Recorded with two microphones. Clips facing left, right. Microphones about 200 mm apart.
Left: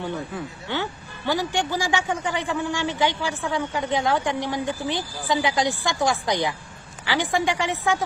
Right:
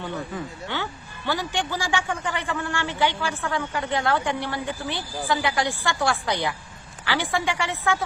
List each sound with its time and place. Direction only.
0.7 s speech: 15° left (ahead or behind)